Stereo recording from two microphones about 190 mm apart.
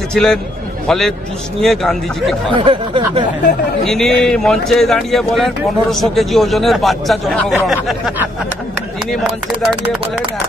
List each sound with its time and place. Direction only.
0.1 s a man's voice: centre (ahead or behind)
2.5 s speech: 30° right (ahead or behind)
3.8 s a man's voice: centre (ahead or behind)